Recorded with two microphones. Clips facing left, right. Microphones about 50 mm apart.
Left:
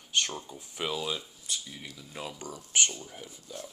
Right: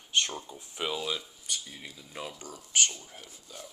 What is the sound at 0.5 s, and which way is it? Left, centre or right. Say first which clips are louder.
Speech: even; centre.